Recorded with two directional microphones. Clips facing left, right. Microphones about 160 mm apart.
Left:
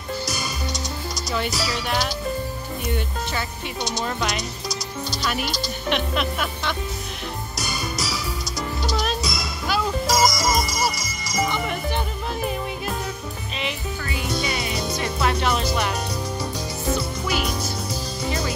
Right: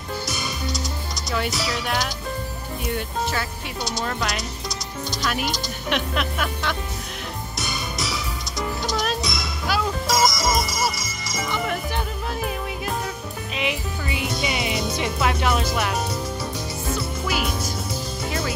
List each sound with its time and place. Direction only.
1.1 s speech: centre (ahead or behind)
5.9 s speech: centre (ahead or behind)
7.6 s music: centre (ahead or behind)
13.6 s music: 15° right (ahead or behind)
15.0 s music: centre (ahead or behind)